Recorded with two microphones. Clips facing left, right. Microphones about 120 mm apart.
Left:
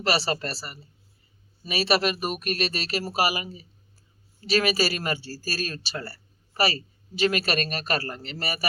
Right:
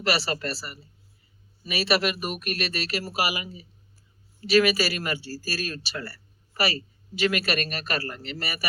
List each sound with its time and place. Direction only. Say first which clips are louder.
0.0 s speech: left 1 dB; 30° left (ahead or behind)